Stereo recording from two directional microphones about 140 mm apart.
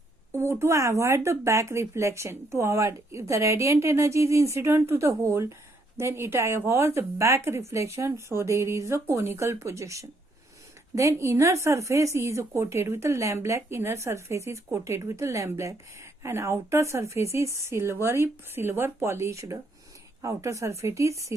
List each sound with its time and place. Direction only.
0.3 s speech: 20° right (ahead or behind)